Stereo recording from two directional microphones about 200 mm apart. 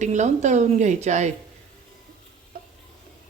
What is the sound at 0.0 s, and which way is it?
Sizzle, 35° right (ahead or behind).